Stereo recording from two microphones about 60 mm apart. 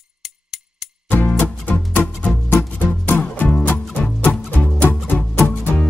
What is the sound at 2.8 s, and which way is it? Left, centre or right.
Music, left.